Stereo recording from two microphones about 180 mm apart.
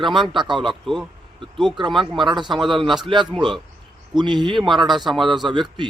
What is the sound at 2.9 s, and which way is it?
Speech, 25° right (ahead or behind).